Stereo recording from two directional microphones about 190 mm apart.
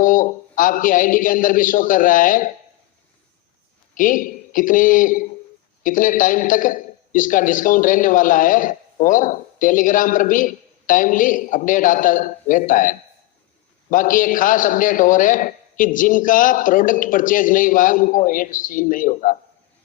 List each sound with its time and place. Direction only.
0.0 s a man's voice: 45° left (ahead or behind)
3.9 s a man's voice: 45° left (ahead or behind)